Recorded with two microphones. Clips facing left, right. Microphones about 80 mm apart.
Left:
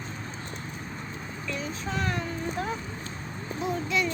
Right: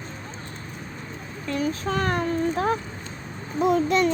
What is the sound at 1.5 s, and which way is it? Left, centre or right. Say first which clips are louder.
A child's voice: right 8 dB; right.